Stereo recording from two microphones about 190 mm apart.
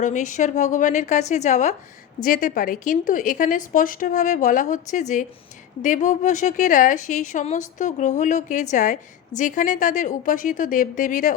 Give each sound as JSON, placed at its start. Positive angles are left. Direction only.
{"t": 0.0, "sound": "a woman's voice", "side_deg": 40}